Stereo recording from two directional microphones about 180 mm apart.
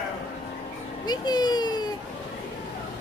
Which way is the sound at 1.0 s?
25° left (ahead or behind).